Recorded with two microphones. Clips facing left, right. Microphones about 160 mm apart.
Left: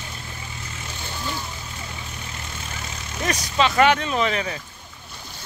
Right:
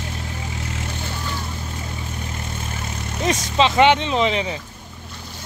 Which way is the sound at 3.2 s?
25° right (ahead or behind).